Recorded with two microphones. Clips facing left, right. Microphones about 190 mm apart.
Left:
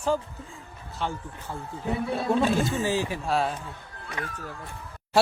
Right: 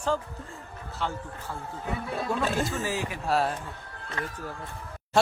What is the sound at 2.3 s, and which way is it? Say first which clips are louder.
Speech: left 5 dB; 25° left (ahead or behind).